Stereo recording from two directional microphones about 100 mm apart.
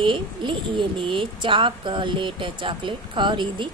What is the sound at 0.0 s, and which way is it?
A woman's voice, 55° right (ahead or behind).